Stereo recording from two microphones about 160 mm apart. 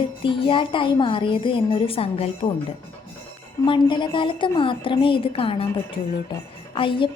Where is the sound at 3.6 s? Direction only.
30° left (ahead or behind).